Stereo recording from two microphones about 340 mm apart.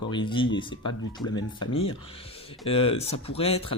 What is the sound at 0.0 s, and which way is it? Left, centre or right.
Speech, centre.